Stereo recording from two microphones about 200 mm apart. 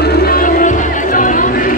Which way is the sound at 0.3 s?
40° left (ahead or behind).